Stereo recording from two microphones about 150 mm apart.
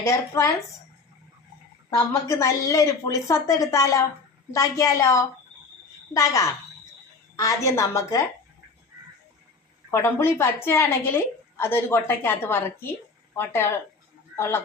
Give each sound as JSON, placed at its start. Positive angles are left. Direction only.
{"t": 0.0, "sound": "speech", "side_deg": 20}
{"t": 2.2, "sound": "speech", "side_deg": 20}
{"t": 9.9, "sound": "a woman's voice", "side_deg": 15}